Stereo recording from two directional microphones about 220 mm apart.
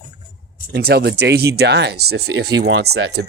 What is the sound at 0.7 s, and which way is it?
Speech, 45° right (ahead or behind).